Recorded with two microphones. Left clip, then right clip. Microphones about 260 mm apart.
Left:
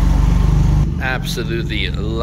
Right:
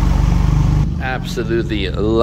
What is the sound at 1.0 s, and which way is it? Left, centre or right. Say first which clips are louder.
Speech: left 1 dB; centre.